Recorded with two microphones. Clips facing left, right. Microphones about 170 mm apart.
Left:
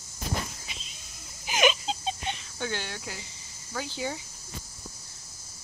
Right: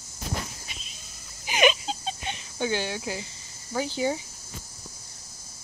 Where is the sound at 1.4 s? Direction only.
Centre (ahead or behind).